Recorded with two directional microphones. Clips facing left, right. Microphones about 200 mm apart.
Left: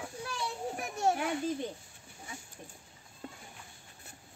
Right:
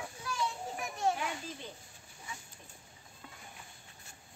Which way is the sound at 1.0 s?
50° left (ahead or behind).